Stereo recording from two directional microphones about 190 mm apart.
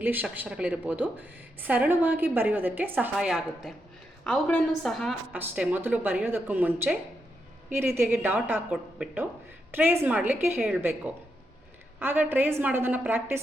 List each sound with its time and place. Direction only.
0.0 s a woman's voice: 10° right (ahead or behind)
5.3 s a woman's voice: 10° right (ahead or behind)